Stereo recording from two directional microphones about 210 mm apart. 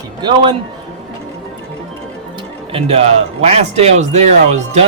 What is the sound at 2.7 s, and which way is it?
A man's voice, 30° right (ahead or behind).